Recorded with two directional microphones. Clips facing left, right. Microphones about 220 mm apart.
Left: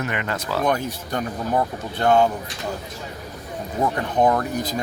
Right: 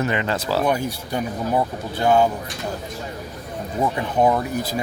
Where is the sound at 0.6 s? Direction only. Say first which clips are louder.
Right 1 dB; 10° right (ahead or behind).